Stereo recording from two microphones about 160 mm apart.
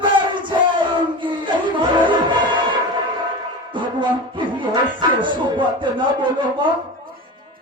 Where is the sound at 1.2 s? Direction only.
30° right (ahead or behind).